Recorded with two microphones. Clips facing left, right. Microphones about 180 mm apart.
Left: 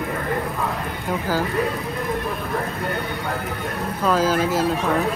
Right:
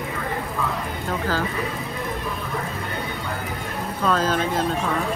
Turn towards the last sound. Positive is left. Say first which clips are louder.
# left 3 dB
turn(degrees=5)  # may be behind; listen again after turning